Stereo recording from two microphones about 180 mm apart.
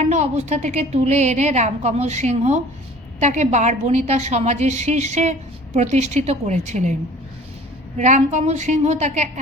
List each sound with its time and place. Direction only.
0.0 s a woman's voice: 40° right (ahead or behind)
7.9 s a woman's voice: 40° right (ahead or behind)